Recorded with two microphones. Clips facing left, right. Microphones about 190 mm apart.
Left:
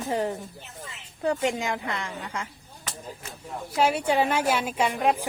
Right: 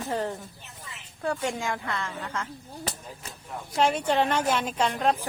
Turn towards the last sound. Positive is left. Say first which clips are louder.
# left 1 dB
turn(degrees=10)  # may be behind; listen again after turning